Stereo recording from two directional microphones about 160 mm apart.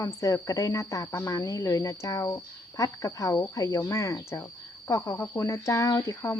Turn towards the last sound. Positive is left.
turn(degrees=20)  # may be behind; listen again after turning